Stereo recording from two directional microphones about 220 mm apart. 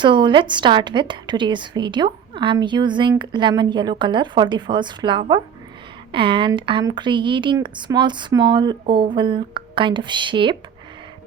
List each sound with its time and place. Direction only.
0.0 s a woman's voice: 20° right (ahead or behind)